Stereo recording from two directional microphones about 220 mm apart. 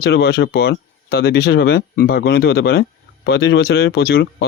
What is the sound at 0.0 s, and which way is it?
Speech, 45° left (ahead or behind).